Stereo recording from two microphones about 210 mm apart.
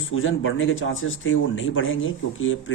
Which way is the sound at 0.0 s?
70° left (ahead or behind).